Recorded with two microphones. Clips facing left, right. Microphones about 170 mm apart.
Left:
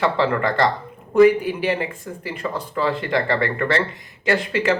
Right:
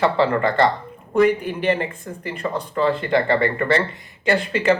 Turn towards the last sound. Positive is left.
turn(degrees=0)  # may be behind; listen again after turning